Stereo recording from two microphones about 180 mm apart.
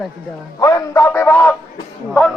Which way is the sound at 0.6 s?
20° left (ahead or behind).